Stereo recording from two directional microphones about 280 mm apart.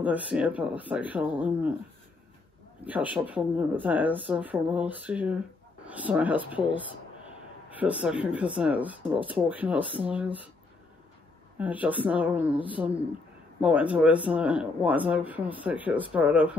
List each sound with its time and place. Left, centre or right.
0.0 s speech: centre
2.8 s speech: centre
11.5 s speech: centre